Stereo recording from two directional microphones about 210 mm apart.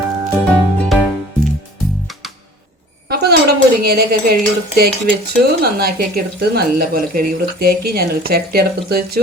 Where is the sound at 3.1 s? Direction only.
50° right (ahead or behind).